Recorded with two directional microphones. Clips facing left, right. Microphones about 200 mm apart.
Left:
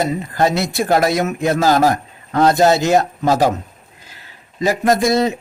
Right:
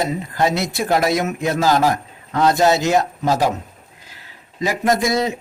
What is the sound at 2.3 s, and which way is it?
Speech, 45° left (ahead or behind).